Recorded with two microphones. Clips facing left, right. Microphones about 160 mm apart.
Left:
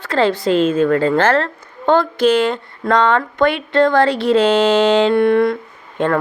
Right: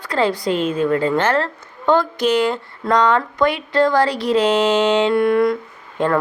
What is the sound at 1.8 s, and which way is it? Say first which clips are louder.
Speech: left 3 dB; 25° left (ahead or behind).